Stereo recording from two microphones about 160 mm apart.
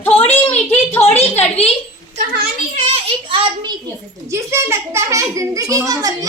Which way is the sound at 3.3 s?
35° right (ahead or behind).